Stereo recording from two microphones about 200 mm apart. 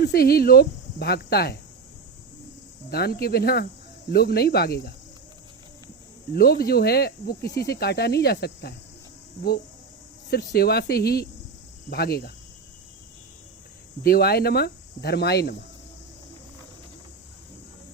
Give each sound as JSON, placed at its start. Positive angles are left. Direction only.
{"t": 0.0, "sound": "speech", "side_deg": 50}
{"t": 2.9, "sound": "speech", "side_deg": 50}
{"t": 6.3, "sound": "speech", "side_deg": 50}
{"t": 10.2, "sound": "speech", "side_deg": 50}
{"t": 14.0, "sound": "speech", "side_deg": 50}